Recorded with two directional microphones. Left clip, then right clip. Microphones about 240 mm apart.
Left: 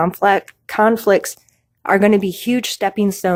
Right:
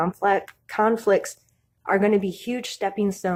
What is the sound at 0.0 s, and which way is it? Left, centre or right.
Speech, left.